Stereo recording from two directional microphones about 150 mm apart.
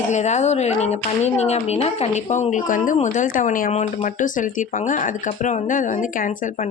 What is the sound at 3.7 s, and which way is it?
Speech, 45° left (ahead or behind).